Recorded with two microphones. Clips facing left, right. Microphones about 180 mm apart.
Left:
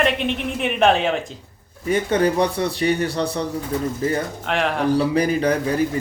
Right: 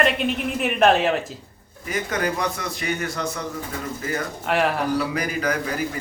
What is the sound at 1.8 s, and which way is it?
A man's voice, 30° left (ahead or behind).